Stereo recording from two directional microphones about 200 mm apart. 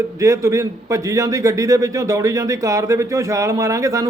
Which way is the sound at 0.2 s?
15° right (ahead or behind).